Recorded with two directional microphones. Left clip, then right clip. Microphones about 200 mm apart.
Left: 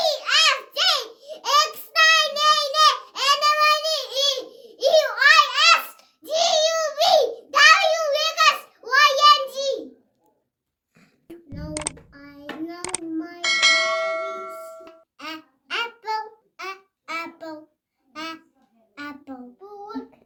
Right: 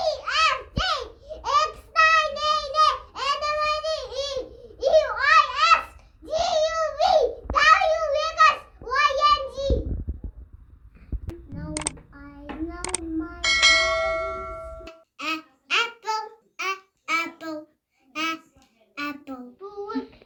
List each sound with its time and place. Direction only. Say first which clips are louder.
0.0 s a sound: left 3 dB; 20° left (ahead or behind)
11.7 s a sound: left 1 dB; centre (ahead or behind)
12.2 s hands: left 1 dB; 15° left (ahead or behind)
12.8 s child singing: even; centre (ahead or behind)
13.4 s bell: even; centre (ahead or behind)
15.2 s babbling: right 6 dB; 20° left (ahead or behind)
18.1 s child singing: right 6 dB; 20° left (ahead or behind)
18.9 s hands: right 4 dB; 15° left (ahead or behind)